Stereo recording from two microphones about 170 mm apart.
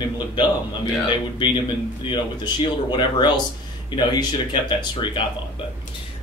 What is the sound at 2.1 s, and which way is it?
Speech, 30° left (ahead or behind).